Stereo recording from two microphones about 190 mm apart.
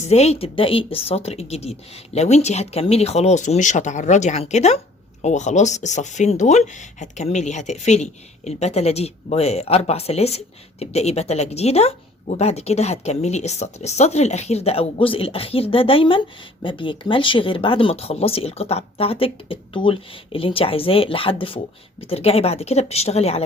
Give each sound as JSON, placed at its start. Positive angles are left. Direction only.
{"t": 0.0, "sound": "speech", "side_deg": 35}